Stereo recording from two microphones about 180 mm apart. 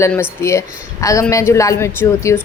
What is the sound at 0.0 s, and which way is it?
A child's voice, 15° left (ahead or behind).